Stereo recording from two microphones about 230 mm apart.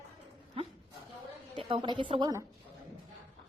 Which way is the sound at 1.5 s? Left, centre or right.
Right.